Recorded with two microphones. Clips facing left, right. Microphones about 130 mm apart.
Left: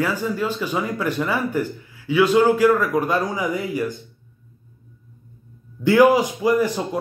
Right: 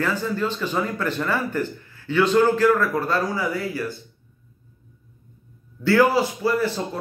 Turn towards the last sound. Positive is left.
turn(degrees=15)  # may be behind; listen again after turning